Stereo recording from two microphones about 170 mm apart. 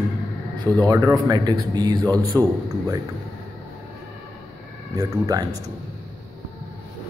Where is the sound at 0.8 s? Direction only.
20° right (ahead or behind).